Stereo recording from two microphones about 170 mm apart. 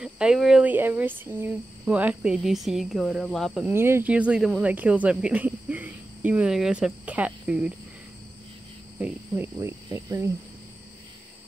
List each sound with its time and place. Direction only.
0.0 s speech: 5° right (ahead or behind)
3.6 s speech: 15° right (ahead or behind)
9.0 s speech: 15° right (ahead or behind)